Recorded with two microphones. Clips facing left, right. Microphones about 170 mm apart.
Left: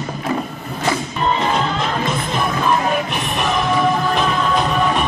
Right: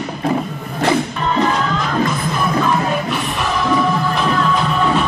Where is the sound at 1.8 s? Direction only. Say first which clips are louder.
Right 2 dB; 20° left (ahead or behind).